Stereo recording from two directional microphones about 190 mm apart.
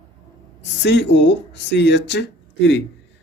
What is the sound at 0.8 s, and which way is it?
Speech, 65° left (ahead or behind).